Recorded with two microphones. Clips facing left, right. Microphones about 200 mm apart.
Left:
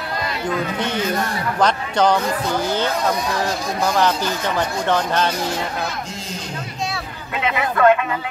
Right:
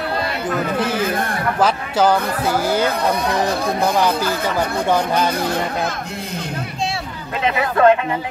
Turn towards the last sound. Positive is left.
turn(degrees=-35)  # may be behind; listen again after turning